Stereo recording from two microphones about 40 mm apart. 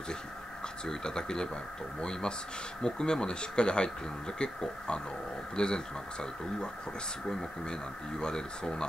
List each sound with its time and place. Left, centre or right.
0.8 s speech: centre
8.2 s speech: centre